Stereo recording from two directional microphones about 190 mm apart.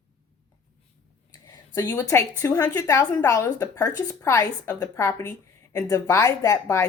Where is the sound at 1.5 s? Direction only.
15° left (ahead or behind).